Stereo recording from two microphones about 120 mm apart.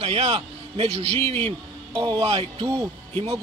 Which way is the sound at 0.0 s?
55° right (ahead or behind).